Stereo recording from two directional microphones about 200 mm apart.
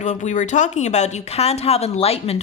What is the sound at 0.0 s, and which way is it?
Speech, 35° left (ahead or behind).